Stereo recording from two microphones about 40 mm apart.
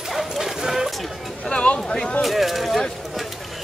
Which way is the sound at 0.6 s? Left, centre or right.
Centre.